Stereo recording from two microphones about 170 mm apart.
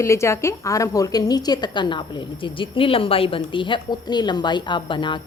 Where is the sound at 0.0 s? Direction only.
15° left (ahead or behind).